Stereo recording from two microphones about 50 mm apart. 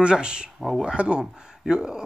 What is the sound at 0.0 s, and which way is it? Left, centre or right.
Speech, centre.